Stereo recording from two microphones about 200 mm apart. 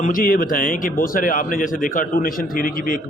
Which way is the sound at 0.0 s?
45° left (ahead or behind).